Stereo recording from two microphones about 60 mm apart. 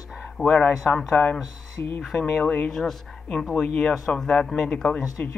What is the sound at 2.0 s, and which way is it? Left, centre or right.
Speech, centre.